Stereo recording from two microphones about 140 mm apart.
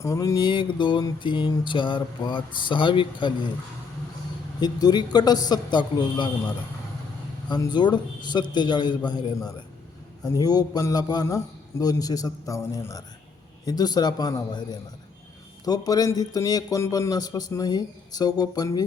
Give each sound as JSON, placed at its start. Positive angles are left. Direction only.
{"t": 0.0, "sound": "mantra", "side_deg": 20}
{"t": 4.6, "sound": "a man's voice", "side_deg": 30}
{"t": 7.4, "sound": "mantra", "side_deg": 30}
{"t": 10.4, "sound": "a man's voice", "side_deg": 25}